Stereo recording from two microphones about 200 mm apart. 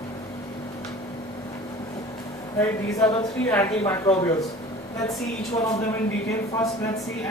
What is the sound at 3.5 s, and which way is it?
Speech, 10° left (ahead or behind).